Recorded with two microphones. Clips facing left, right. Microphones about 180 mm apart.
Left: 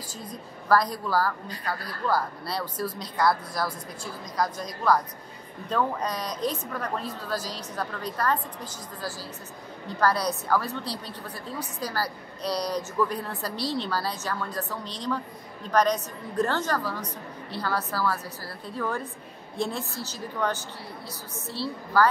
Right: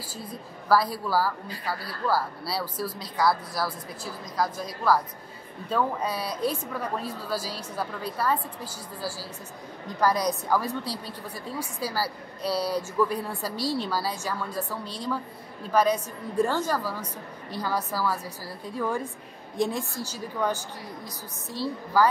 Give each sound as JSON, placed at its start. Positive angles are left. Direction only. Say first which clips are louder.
{"t": 0.7, "sound": "a woman's voice", "louder": "even", "side_deg": -5}
{"t": 9.9, "sound": "a woman's voice", "louder": "right 1 dB", "side_deg": -10}